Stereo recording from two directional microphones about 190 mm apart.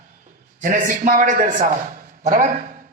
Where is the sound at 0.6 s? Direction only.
45° right (ahead or behind).